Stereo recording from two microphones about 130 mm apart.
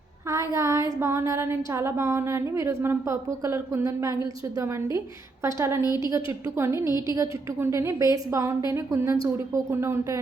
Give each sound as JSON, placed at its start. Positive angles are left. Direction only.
{"t": 0.3, "sound": "a sound", "side_deg": -25}
{"t": 0.9, "sound": "a woman's voice", "side_deg": -20}
{"t": 5.8, "sound": "a woman's voice", "side_deg": 30}
{"t": 6.6, "sound": "a woman's voice", "side_deg": -20}